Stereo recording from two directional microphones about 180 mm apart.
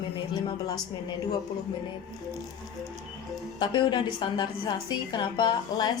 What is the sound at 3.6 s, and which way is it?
A woman's voice, 25° left (ahead or behind).